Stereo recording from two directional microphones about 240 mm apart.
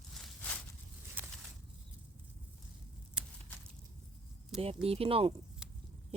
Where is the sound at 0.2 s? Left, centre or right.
Centre.